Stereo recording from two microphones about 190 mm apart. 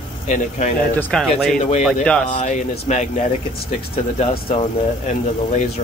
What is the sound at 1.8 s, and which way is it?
Speech, 5° left (ahead or behind).